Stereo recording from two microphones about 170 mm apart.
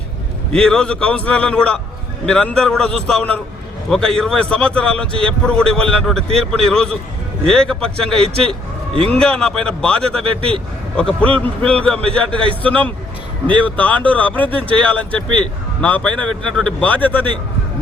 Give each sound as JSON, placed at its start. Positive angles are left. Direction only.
{"t": 0.5, "sound": "a man's voice", "side_deg": 5}
{"t": 8.2, "sound": "a man's voice", "side_deg": -35}
{"t": 9.2, "sound": "a man's voice", "side_deg": 5}
{"t": 12.0, "sound": "a man's voice", "side_deg": -30}
{"t": 12.6, "sound": "speech", "side_deg": 10}